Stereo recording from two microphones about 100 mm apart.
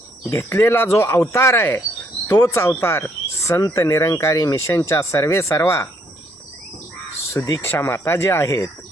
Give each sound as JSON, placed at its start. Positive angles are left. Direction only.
{"t": 0.3, "sound": "speech", "side_deg": 25}
{"t": 7.3, "sound": "speech", "side_deg": 35}
{"t": 7.6, "sound": "speech", "side_deg": 25}